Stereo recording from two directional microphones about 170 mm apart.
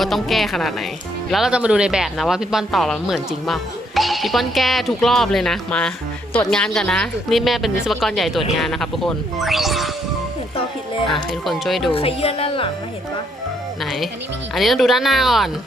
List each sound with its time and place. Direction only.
0.0 s speech: centre (ahead or behind)
11.1 s speech: centre (ahead or behind)
11.9 s speech: 35° left (ahead or behind)
14.5 s speech: centre (ahead or behind)